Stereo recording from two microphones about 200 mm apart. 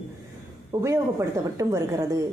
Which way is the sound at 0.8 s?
15° right (ahead or behind).